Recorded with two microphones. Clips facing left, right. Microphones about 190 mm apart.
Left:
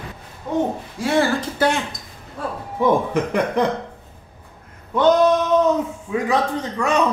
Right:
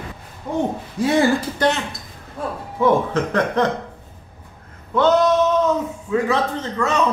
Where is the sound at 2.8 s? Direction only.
15° left (ahead or behind).